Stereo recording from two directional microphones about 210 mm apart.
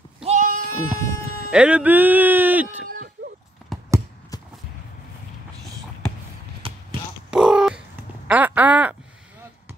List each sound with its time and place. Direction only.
0.2 s bleat: 35° right (ahead or behind)
1.5 s speech: 5° right (ahead or behind)
2.7 s a sound: 40° right (ahead or behind)
3.7 s a sound: centre (ahead or behind)
6.6 s basketball bounce: 25° right (ahead or behind)
7.2 s crow: 5° right (ahead or behind)